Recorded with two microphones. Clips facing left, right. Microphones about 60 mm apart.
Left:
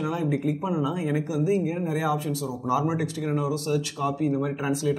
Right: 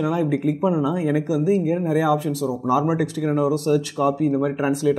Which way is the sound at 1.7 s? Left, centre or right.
Right.